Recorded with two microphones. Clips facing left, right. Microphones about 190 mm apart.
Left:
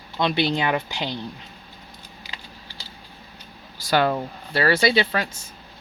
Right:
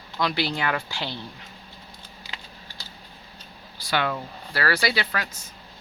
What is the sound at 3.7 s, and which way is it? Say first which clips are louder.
Speech: left 6 dB; 40° left (ahead or behind).